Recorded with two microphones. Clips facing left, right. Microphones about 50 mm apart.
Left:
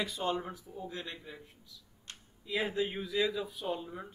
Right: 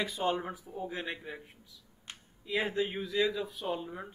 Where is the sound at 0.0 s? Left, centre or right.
Centre; by 1.5 s right.